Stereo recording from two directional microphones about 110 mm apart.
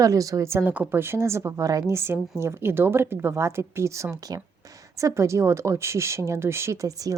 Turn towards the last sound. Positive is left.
turn(degrees=-30)  # may be behind; listen again after turning